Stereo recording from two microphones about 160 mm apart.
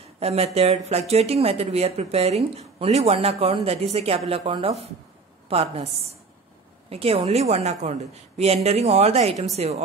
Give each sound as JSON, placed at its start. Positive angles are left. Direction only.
{"t": 0.2, "sound": "speech", "side_deg": -40}
{"t": 6.9, "sound": "speech", "side_deg": -40}